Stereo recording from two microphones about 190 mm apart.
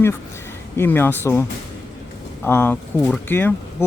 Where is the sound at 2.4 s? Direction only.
10° left (ahead or behind).